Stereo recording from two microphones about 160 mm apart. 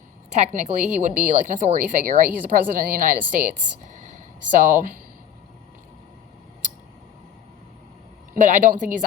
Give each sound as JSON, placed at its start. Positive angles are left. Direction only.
{"t": 0.3, "sound": "a woman's voice", "side_deg": -45}
{"t": 8.4, "sound": "speech", "side_deg": -55}